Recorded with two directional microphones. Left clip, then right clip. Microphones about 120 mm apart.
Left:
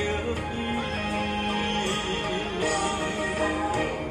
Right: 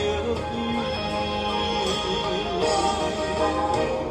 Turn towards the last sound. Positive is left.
turn(degrees=-40)  # may be behind; listen again after turning